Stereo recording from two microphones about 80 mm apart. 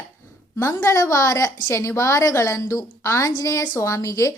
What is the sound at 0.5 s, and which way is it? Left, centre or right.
A woman's voice, left.